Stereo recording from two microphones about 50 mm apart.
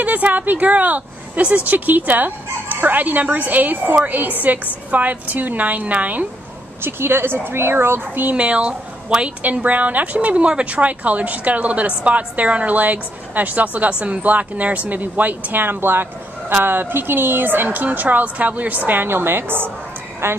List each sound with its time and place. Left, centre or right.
0.0 s a woman's voice: right
6.8 s speech: right
8.5 s speech: right
9.6 s a woman's voice: right